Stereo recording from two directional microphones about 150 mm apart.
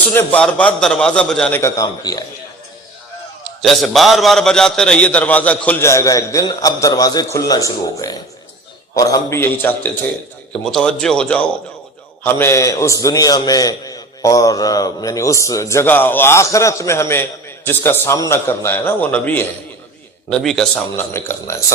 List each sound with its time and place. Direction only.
0.0 s a man's voice: 15° left (ahead or behind)
3.6 s a man's voice: centre (ahead or behind)
12.2 s a man's voice: 15° left (ahead or behind); by 20.8 s centre (ahead or behind)
20.9 s a man's voice: 15° left (ahead or behind)